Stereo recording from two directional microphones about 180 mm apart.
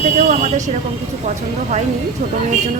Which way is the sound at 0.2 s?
45° right (ahead or behind).